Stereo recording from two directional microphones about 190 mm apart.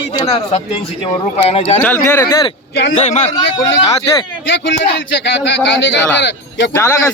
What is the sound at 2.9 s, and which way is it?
Speech, 35° left (ahead or behind).